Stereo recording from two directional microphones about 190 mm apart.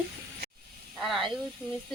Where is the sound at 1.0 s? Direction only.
Centre (ahead or behind).